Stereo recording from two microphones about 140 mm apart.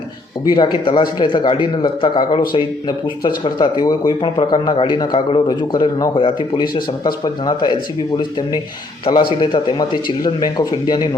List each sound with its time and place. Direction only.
0.4 s speech: 35° left (ahead or behind)